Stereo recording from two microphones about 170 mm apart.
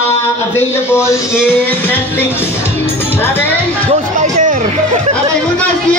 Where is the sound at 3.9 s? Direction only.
45° right (ahead or behind).